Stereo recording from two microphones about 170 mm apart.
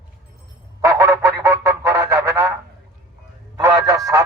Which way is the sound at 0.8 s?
20° right (ahead or behind).